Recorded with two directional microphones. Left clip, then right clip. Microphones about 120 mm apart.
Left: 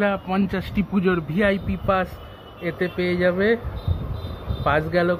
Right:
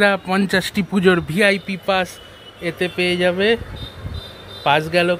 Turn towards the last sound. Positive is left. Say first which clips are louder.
# right 4 dB
turn(degrees=-50)  # may be behind; listen again after turning